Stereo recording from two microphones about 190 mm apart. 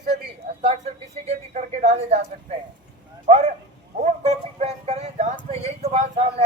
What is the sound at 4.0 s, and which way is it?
Speech, 35° right (ahead or behind).